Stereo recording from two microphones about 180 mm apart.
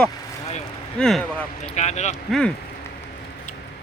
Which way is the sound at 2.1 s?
Centre (ahead or behind).